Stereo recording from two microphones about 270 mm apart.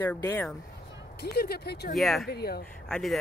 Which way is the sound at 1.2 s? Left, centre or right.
Left.